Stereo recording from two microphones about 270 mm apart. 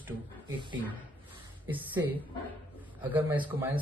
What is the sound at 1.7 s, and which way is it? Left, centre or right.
A man's voice, centre.